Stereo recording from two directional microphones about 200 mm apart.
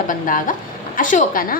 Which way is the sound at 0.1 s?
40° left (ahead or behind).